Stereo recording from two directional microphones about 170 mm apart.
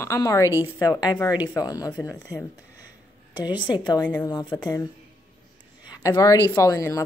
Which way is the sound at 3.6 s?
25° left (ahead or behind).